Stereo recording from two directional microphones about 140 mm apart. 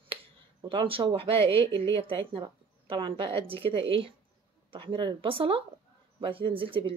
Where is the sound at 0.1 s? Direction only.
35° right (ahead or behind).